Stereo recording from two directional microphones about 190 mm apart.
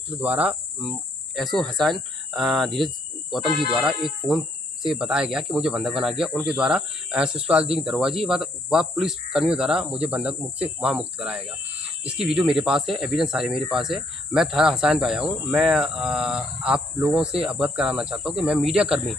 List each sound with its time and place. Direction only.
0.2 s cricket: 5° right (ahead or behind)
3.7 s speech: centre (ahead or behind)